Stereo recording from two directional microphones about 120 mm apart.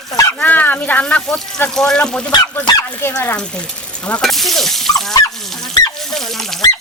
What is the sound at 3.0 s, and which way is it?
Speech, 20° left (ahead or behind).